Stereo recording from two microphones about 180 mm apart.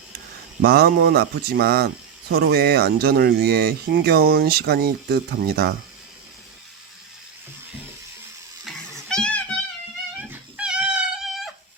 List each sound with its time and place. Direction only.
0.6 s speech: 60° right (ahead or behind)
8.6 s a sound: 5° left (ahead or behind)
10.2 s dog: 5° right (ahead or behind)